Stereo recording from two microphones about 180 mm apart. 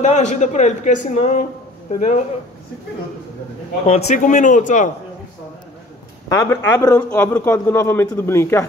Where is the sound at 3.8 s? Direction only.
35° left (ahead or behind).